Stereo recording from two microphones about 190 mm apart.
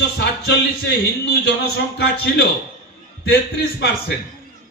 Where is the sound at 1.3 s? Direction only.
55° left (ahead or behind).